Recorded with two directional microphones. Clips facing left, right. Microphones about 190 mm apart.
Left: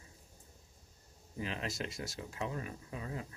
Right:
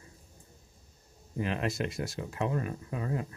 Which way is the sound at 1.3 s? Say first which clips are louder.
Right 8 dB; 60° right (ahead or behind).